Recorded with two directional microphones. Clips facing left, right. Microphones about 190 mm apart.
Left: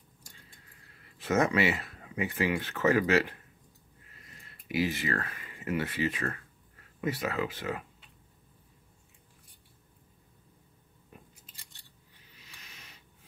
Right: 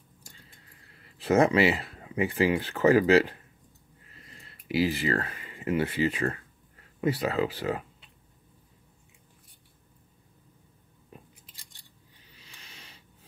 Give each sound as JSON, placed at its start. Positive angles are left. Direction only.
{"t": 1.2, "sound": "speech", "side_deg": -30}
{"t": 4.6, "sound": "speech", "side_deg": -30}
{"t": 12.4, "sound": "a sound", "side_deg": -30}